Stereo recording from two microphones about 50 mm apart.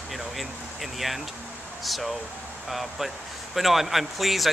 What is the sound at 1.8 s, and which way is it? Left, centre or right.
Speech, centre.